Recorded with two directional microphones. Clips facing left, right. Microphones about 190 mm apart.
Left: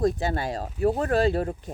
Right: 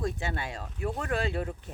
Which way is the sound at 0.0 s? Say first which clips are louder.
Left 8 dB; 35° left (ahead or behind).